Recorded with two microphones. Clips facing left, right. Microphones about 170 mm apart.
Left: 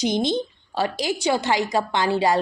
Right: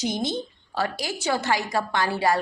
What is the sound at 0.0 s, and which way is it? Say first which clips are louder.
A woman's voice: left 5 dB; 20° left (ahead or behind).